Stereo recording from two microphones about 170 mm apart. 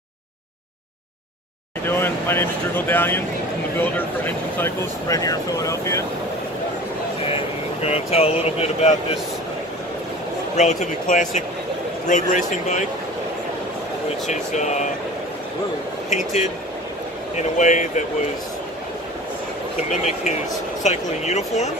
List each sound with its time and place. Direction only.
1.9 s speech: 15° left (ahead or behind)
7.8 s speech: 35° left (ahead or behind)
10.5 s speech: 45° left (ahead or behind)
14.2 s speech: 45° left (ahead or behind)
17.4 s speech: 45° left (ahead or behind)
19.9 s speech: 45° left (ahead or behind)